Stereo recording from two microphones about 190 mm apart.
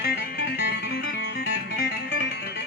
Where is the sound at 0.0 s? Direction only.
55° left (ahead or behind).